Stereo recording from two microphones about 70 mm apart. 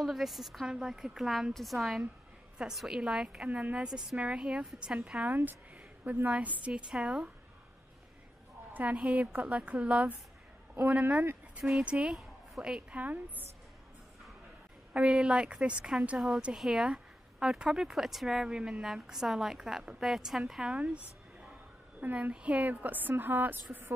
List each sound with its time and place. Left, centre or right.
0.0 s a woman's voice: centre
5.3 s a woman's voice: right
8.7 s a woman's voice: centre
13.0 s a woman's voice: right
15.0 s a woman's voice: centre
20.7 s a sound: centre
22.0 s a woman's voice: right